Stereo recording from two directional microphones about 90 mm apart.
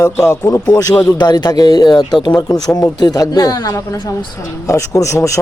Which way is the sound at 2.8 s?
45° left (ahead or behind).